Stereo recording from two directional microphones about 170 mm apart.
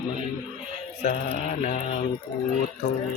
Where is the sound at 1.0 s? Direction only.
45° left (ahead or behind).